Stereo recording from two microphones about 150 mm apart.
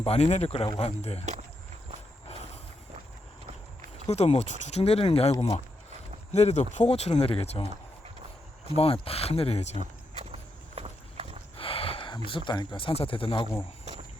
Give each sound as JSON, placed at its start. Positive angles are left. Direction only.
{"t": 0.0, "sound": "speech", "side_deg": 45}
{"t": 1.2, "sound": "speech", "side_deg": -50}
{"t": 2.2, "sound": "a sound", "side_deg": 45}
{"t": 3.9, "sound": "speech", "side_deg": 45}
{"t": 6.3, "sound": "speech", "side_deg": 50}
{"t": 8.7, "sound": "speech", "side_deg": 40}
{"t": 9.7, "sound": "walk", "side_deg": -45}
{"t": 11.5, "sound": "speech", "side_deg": 40}